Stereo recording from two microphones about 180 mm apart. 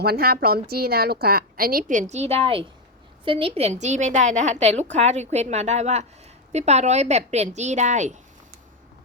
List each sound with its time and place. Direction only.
0.0 s a woman's voice: 60° right (ahead or behind); by 8.1 s 40° right (ahead or behind)